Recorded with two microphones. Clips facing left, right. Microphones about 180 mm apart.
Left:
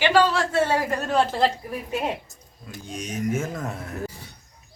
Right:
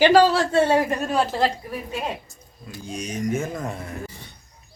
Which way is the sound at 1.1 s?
5° right (ahead or behind).